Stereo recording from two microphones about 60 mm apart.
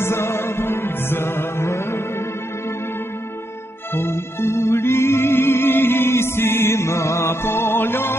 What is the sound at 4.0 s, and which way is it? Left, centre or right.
Music, left.